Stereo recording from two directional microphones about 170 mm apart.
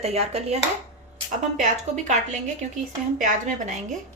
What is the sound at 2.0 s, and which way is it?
Speech, 45° right (ahead or behind).